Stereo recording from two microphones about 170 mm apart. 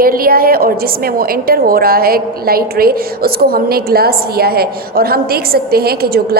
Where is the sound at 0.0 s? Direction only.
60° right (ahead or behind).